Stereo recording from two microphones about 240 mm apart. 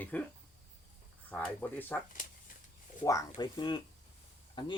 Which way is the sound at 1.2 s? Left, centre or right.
Centre.